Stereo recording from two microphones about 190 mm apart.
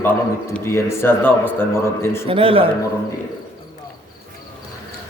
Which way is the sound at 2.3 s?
30° right (ahead or behind).